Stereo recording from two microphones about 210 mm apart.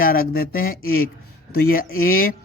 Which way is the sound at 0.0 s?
45° left (ahead or behind).